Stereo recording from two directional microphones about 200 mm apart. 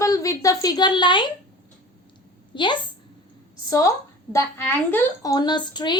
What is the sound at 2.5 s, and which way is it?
A woman's voice, 25° left (ahead or behind).